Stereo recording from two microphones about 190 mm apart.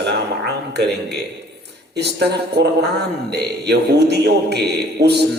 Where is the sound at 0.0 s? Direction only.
60° right (ahead or behind).